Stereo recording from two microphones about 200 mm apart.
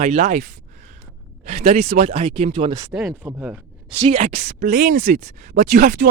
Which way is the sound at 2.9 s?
5° right (ahead or behind).